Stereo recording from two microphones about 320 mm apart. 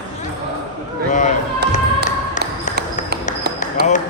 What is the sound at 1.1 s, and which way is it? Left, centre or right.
Chop, left.